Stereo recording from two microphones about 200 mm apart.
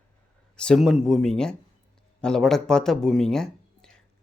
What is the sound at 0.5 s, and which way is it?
Speech, 5° left (ahead or behind).